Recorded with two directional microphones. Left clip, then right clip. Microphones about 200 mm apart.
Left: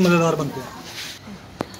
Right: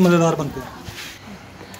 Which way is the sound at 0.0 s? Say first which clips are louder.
Right 1 dB; 40° right (ahead or behind).